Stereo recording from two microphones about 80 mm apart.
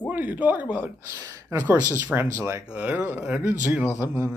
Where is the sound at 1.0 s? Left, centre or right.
Right.